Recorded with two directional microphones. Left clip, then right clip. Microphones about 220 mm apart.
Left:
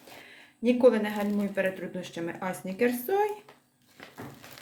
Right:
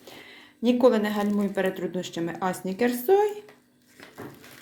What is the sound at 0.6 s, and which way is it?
Speech, 20° right (ahead or behind).